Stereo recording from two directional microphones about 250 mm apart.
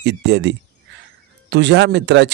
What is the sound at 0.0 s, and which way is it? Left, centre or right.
Speech, right.